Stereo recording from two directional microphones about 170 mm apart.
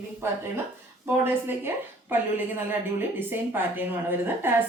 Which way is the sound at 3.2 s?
10° right (ahead or behind).